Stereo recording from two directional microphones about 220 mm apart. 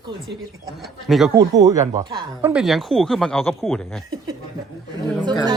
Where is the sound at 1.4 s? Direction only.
15° right (ahead or behind).